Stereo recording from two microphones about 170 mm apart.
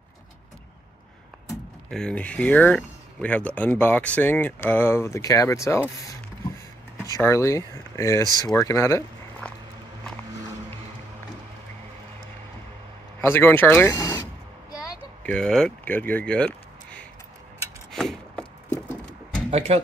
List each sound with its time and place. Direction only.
1.9 s speech: 5° left (ahead or behind)
13.2 s speech: 15° left (ahead or behind)
15.2 s speech: 5° left (ahead or behind)
17.9 s vehicle: centre (ahead or behind)
19.5 s speech: 40° right (ahead or behind)